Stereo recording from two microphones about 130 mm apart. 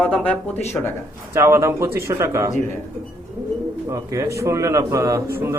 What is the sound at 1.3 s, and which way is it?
A man's voice, 20° right (ahead or behind).